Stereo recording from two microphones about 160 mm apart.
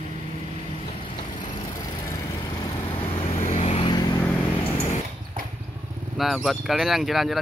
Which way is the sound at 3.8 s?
25° left (ahead or behind).